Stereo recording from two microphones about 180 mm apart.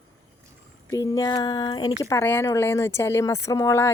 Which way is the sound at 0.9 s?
20° left (ahead or behind).